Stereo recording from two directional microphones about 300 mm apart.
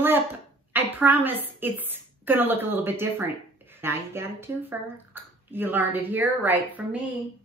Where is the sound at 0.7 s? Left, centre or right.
Centre.